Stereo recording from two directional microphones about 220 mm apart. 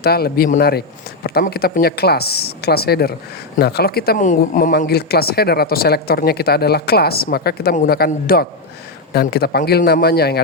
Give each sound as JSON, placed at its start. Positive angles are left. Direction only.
{"t": 0.0, "sound": "speech", "side_deg": 45}